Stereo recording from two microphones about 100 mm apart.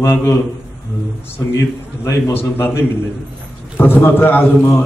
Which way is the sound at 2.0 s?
25° left (ahead or behind).